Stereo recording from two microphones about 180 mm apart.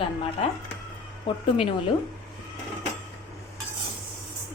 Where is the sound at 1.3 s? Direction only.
30° left (ahead or behind).